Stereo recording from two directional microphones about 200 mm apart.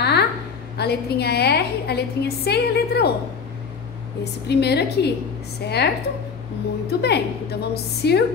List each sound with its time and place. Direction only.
0.0 s a sound: 55° left (ahead or behind)
0.7 s a woman's voice: 55° left (ahead or behind)
4.2 s a woman's voice: 55° left (ahead or behind)
6.9 s a woman's voice: 55° left (ahead or behind)